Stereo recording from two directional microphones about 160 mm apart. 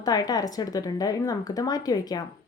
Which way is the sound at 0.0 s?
25° left (ahead or behind).